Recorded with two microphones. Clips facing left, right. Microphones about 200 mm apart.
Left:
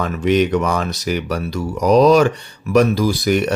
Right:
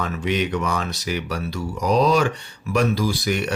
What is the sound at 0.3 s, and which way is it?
Speech, 40° left (ahead or behind).